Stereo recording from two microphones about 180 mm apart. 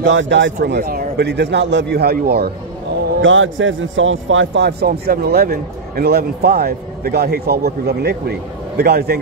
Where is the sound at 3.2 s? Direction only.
90° right; by 9.2 s 60° right (ahead or behind).